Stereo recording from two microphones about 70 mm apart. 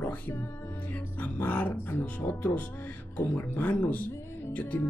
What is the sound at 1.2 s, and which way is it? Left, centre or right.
Speech, left.